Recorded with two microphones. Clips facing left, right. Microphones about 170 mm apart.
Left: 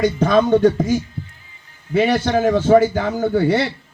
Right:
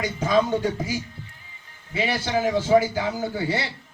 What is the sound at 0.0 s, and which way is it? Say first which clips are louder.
A man's voice: left 6 dB; 70° left (ahead or behind).